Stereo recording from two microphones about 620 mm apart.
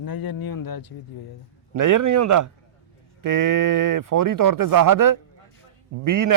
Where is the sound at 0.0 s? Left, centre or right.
Left.